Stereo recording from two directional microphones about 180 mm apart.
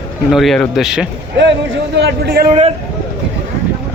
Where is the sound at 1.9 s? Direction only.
65° right (ahead or behind).